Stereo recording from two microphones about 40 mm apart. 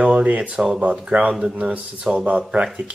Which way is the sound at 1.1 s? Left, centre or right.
Right.